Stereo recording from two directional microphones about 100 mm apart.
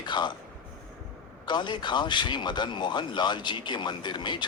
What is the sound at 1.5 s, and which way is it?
A man's voice, 50° left (ahead or behind).